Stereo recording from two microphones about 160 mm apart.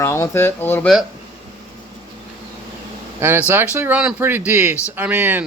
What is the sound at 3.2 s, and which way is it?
Speech, 15° right (ahead or behind).